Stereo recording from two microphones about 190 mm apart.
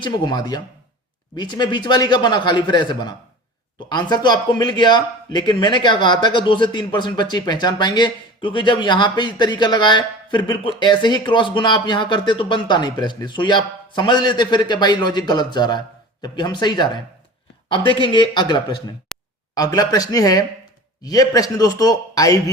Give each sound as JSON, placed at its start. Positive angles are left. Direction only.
{"t": 0.0, "sound": "speech", "side_deg": 20}